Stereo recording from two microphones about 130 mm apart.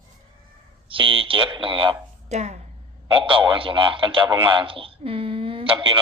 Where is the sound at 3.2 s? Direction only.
40° right (ahead or behind).